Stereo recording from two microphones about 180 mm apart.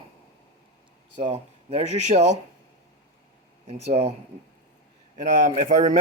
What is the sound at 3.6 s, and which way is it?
Speech, 35° right (ahead or behind).